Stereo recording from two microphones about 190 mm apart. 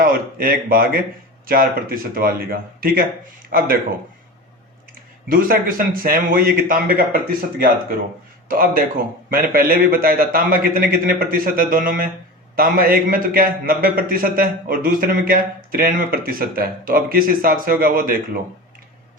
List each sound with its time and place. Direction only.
0.0 s a man's voice: 50° right (ahead or behind)
5.3 s a man's voice: 50° right (ahead or behind)